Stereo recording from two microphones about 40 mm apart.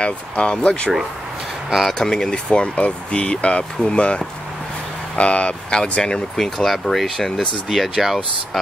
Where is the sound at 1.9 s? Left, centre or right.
Centre.